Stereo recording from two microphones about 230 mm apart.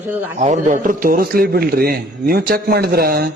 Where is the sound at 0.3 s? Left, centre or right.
Right.